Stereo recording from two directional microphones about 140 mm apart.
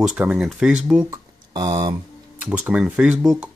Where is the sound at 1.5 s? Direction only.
35° right (ahead or behind).